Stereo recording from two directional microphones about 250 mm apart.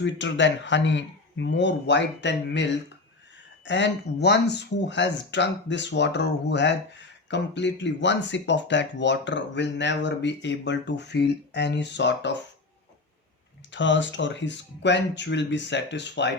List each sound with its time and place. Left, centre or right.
0.0 s speech: left
13.7 s speech: left